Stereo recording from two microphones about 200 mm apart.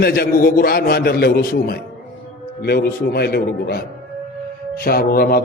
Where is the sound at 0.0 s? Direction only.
50° left (ahead or behind).